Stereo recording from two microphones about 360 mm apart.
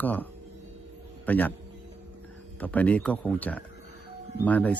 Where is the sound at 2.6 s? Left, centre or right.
Centre.